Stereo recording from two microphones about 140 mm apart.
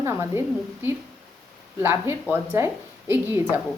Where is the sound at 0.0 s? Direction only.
20° right (ahead or behind).